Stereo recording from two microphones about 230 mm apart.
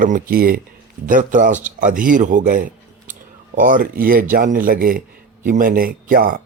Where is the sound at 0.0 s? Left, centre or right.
Right.